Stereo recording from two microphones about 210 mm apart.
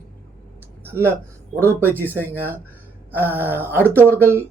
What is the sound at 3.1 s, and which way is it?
Speech, 10° right (ahead or behind).